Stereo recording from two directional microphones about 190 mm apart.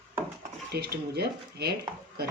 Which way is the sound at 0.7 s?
55° right (ahead or behind).